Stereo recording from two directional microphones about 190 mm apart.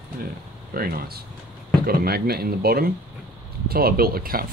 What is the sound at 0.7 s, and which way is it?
Speech, 50° right (ahead or behind).